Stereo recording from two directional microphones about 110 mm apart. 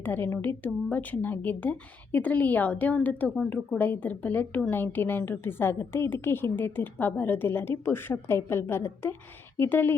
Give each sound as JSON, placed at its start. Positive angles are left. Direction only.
{"t": 0.0, "sound": "a woman's voice", "side_deg": 15}